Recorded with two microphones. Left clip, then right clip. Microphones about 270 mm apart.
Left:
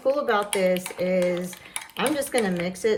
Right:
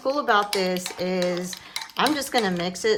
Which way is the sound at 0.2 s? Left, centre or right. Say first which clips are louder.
Right 1 dB; centre.